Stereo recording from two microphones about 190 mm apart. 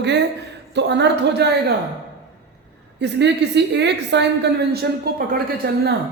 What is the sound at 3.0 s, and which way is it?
A man's voice, 65° right (ahead or behind).